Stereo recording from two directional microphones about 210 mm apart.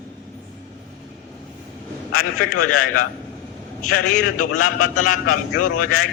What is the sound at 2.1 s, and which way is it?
A man's voice, 90° left.